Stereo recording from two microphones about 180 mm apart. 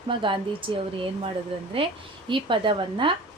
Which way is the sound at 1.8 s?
30° right (ahead or behind).